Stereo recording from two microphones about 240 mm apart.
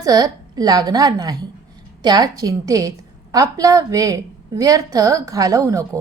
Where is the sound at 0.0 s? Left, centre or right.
Centre.